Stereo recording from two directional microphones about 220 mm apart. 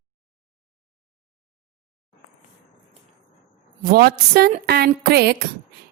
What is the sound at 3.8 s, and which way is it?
Speech, 45° right (ahead or behind).